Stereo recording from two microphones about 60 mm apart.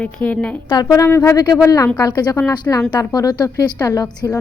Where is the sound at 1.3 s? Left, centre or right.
Left.